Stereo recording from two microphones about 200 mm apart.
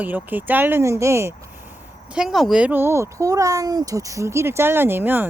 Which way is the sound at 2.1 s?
Centre (ahead or behind).